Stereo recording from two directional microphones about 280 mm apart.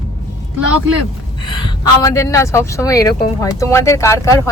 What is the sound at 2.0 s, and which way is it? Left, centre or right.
Speech, centre.